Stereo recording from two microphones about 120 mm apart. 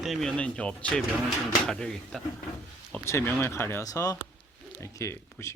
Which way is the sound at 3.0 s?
20° left (ahead or behind).